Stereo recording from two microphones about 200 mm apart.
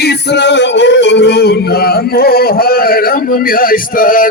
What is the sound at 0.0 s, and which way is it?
Music, 55° left (ahead or behind).